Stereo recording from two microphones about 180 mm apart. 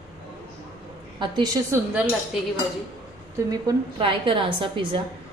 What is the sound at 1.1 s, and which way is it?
Speech, 25° right (ahead or behind).